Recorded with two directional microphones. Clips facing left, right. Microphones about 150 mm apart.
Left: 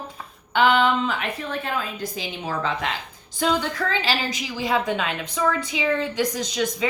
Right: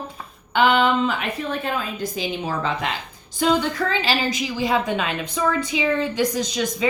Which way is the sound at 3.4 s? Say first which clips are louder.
Right 3 dB; 15° right (ahead or behind).